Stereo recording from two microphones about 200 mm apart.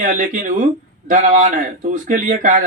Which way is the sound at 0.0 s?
45° right (ahead or behind).